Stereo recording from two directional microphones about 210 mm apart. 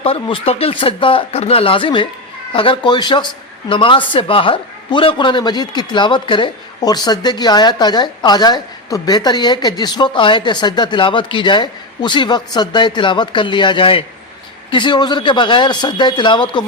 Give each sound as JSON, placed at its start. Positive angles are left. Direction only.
{"t": 0.0, "sound": "a man's voice", "side_deg": 25}